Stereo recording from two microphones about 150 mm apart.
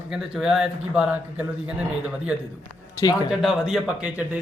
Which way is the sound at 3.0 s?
25° left (ahead or behind).